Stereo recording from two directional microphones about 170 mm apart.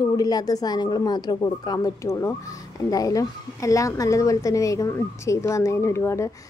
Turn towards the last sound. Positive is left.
turn(degrees=15)  # may be behind; listen again after turning